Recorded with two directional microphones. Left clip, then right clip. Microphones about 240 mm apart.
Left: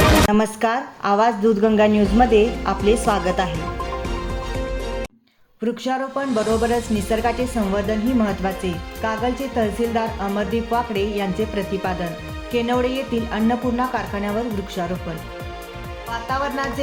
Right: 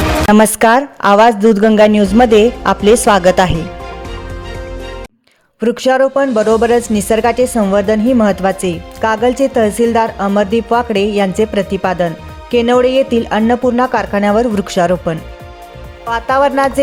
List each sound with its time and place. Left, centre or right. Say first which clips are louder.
0.3 s speech: right 11 dB; right
5.5 s speech: right 12 dB; right
16.1 s speech: right 12 dB; right